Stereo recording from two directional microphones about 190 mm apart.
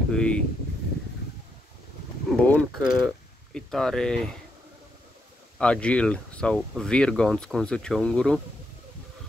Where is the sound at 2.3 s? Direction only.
5° left (ahead or behind).